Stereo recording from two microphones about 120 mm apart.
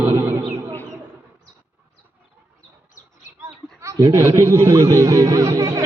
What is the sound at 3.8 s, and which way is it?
A man's voice, 25° right (ahead or behind).